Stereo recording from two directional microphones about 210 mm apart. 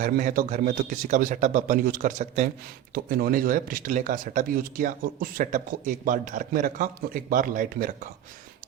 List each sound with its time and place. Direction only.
0.0 s speech: 40° right (ahead or behind)